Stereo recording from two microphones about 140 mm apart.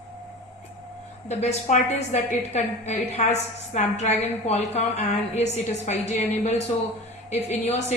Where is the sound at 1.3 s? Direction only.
50° left (ahead or behind).